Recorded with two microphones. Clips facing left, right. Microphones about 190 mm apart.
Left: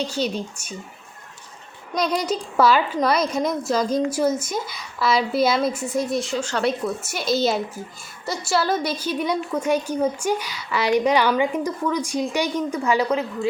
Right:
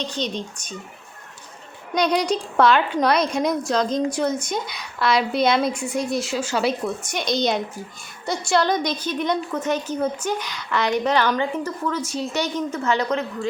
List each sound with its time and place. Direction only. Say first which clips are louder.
0.0 s a woman's voice: left 2 dB; 10° left (ahead or behind)
2.0 s a woman's voice: right 2 dB; 5° left (ahead or behind)